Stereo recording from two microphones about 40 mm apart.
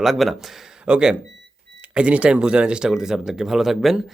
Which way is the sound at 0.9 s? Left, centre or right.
Right.